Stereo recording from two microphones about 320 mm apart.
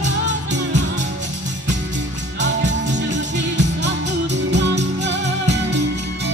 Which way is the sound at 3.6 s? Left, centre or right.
Right.